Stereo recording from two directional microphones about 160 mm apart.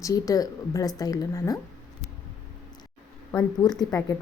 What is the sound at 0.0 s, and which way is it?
A woman's voice, 20° left (ahead or behind).